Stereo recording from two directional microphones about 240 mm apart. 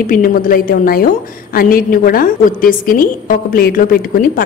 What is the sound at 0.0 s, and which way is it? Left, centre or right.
A woman's voice, left.